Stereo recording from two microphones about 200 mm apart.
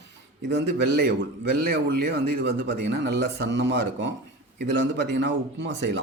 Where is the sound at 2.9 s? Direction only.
60° right (ahead or behind).